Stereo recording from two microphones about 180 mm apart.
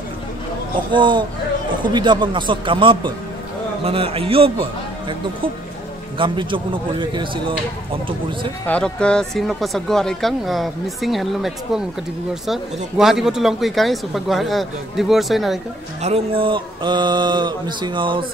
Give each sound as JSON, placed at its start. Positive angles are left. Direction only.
{"t": 0.7, "sound": "a man's voice", "side_deg": -25}
{"t": 8.6, "sound": "speech", "side_deg": 5}
{"t": 16.0, "sound": "a man's voice", "side_deg": -35}